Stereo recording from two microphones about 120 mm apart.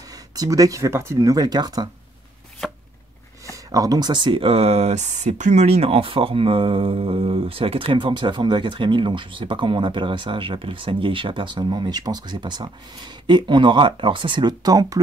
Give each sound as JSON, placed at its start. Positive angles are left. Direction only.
{"t": 0.1, "sound": "speech", "side_deg": -30}
{"t": 2.6, "sound": "chopping", "side_deg": 5}
{"t": 3.4, "sound": "speech", "side_deg": -30}